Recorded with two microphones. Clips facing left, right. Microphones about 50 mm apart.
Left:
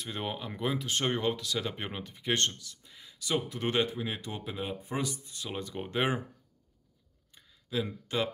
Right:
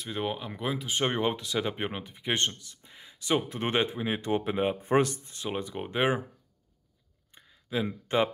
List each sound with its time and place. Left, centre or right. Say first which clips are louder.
0.0 s speech: right 4 dB; centre; by 4.7 s right
4.8 s speech: right 10 dB; right
5.3 s speech: right 4 dB; right
7.3 s a sound: right 2 dB; right